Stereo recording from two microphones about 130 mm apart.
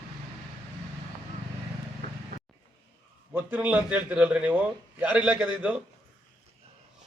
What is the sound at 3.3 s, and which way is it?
A man's voice, 15° right (ahead or behind).